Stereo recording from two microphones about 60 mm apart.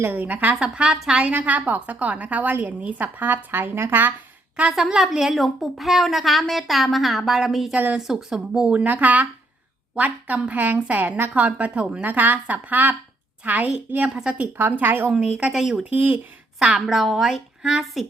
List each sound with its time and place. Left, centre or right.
0.0 s a woman's voice: right
0.5 s speech: centre
1.3 s a woman's voice: right
4.9 s a woman's voice: centre
14.6 s speech: right
15.1 s speech: centre
15.5 s a woman's voice: centre
15.8 s a woman's voice: right
16.6 s a woman's voice: centre
17.6 s a woman's voice: centre